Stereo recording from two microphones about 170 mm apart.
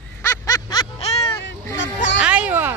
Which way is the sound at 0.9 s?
40° left (ahead or behind).